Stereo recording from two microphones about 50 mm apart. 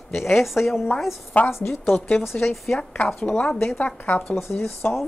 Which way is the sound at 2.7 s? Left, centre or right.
Left.